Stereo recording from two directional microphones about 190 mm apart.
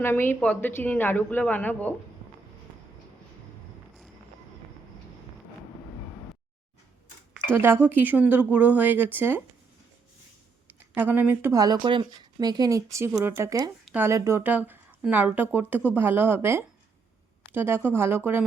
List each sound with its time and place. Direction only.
0.0 s speech: 10° left (ahead or behind)
7.5 s speech: 10° right (ahead or behind)
10.7 s speech: 10° right (ahead or behind)